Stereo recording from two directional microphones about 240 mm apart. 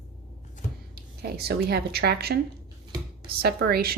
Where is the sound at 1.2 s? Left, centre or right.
Right.